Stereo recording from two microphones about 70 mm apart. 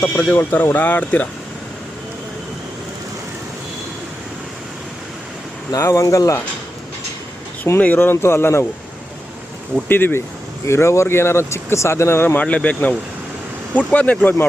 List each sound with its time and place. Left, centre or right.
0.0 s speech: centre
5.7 s speech: left
7.9 s speech: left
9.9 s speech: left
10.7 s speech: left
12.4 s speech: centre